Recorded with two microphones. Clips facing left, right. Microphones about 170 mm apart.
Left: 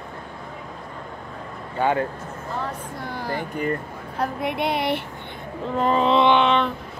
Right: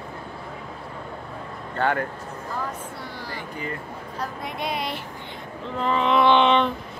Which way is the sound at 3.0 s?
50° left (ahead or behind).